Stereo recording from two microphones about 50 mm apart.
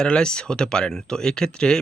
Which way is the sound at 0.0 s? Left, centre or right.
Centre.